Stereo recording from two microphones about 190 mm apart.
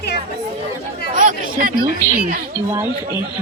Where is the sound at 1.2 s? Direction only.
45° right (ahead or behind).